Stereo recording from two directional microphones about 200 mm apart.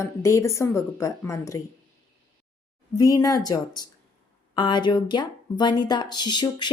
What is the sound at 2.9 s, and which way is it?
Speech, 15° left (ahead or behind).